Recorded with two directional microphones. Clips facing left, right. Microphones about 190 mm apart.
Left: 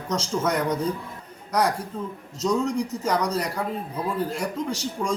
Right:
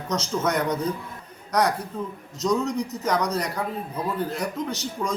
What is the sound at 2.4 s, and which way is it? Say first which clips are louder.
Speech: even; 10° left (ahead or behind).